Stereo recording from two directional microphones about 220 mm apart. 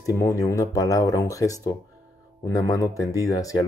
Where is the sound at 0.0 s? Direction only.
15° left (ahead or behind).